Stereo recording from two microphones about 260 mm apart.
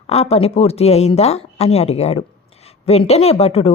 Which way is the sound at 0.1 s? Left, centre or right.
Left.